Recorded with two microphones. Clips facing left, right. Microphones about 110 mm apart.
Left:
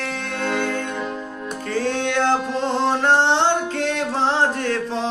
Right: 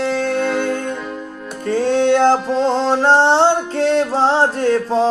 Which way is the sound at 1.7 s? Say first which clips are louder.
Right 9 dB; 30° right (ahead or behind).